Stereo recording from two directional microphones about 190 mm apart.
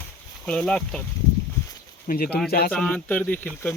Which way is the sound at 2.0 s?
50° left (ahead or behind).